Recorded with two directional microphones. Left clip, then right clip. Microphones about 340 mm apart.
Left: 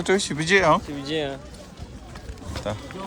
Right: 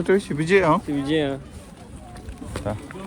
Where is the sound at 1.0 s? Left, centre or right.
Right.